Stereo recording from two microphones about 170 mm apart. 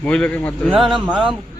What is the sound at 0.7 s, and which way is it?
Speech, 5° right (ahead or behind).